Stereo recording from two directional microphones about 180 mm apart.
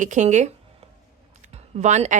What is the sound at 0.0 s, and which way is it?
A woman's voice, 40° right (ahead or behind).